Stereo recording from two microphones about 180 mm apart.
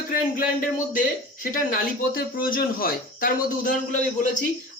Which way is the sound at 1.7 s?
50° left (ahead or behind).